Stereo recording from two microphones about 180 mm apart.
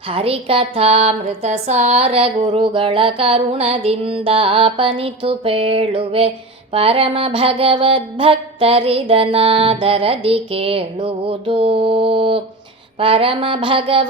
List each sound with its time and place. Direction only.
0.1 s speech: 30° right (ahead or behind)